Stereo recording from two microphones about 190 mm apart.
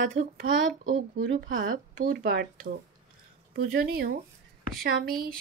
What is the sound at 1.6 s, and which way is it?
Speech, 45° right (ahead or behind).